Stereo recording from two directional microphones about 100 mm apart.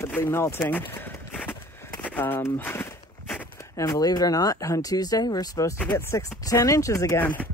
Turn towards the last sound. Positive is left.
turn(degrees=15)  # may be behind; listen again after turning